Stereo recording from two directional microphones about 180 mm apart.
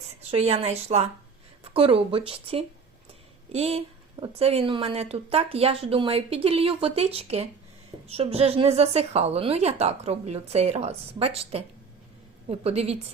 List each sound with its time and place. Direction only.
0.2 s a woman's voice: 35° right (ahead or behind)